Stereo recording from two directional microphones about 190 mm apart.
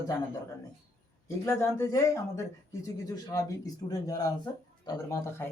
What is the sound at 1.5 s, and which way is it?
Speech, 15° left (ahead or behind).